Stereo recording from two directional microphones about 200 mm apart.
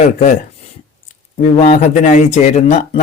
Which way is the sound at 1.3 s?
40° left (ahead or behind).